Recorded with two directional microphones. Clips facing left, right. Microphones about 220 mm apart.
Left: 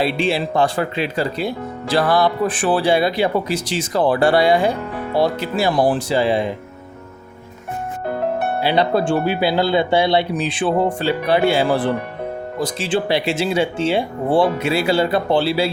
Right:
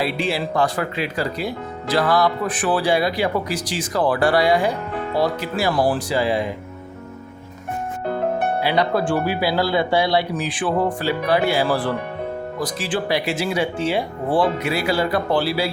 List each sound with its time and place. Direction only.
0.0 s speech: 25° left (ahead or behind)
8.6 s speech: 30° left (ahead or behind)